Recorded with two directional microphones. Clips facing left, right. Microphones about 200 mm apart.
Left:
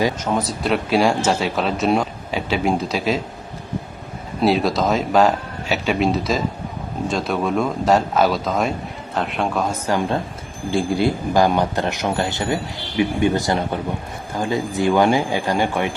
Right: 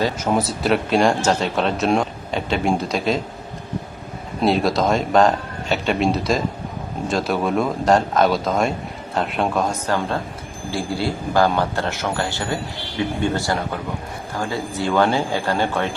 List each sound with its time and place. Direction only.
0.3 s speech: 5° right (ahead or behind)
4.4 s speech: centre (ahead or behind)
9.9 s speech: 15° left (ahead or behind)